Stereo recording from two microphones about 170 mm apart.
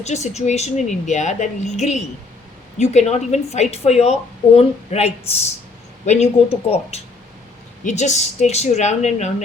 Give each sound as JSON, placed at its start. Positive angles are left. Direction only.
{"t": 0.0, "sound": "a woman's voice", "side_deg": 40}